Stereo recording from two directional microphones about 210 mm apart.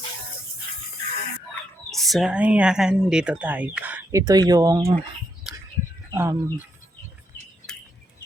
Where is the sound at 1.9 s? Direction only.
Centre (ahead or behind); by 4.8 s 15° right (ahead or behind).